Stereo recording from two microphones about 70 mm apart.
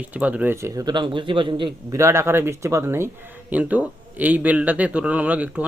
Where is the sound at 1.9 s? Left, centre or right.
Right.